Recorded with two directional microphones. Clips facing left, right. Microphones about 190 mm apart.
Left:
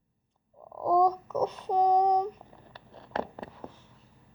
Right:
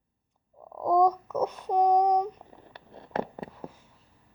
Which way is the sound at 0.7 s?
10° right (ahead or behind).